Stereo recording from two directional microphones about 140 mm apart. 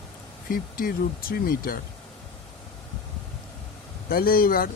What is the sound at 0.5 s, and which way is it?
Speech, 90° left.